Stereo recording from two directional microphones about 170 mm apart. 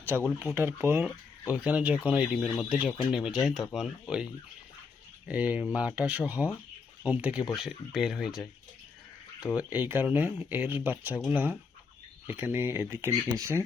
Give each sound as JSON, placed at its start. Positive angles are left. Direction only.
{"t": 0.1, "sound": "speech", "side_deg": -5}
{"t": 5.3, "sound": "speech", "side_deg": -10}
{"t": 9.6, "sound": "speech", "side_deg": -10}